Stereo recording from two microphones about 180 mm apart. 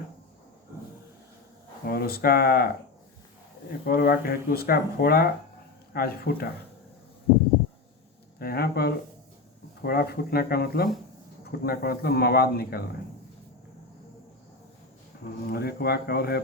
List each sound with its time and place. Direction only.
1.9 s speech: 55° left (ahead or behind)
3.7 s speech: 55° left (ahead or behind)
8.4 s speech: 55° left (ahead or behind)
15.4 s speech: 60° left (ahead or behind)